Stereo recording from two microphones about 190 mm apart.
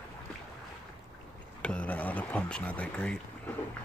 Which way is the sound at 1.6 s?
5° left (ahead or behind).